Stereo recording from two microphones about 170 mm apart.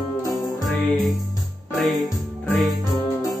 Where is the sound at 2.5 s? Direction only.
Centre (ahead or behind).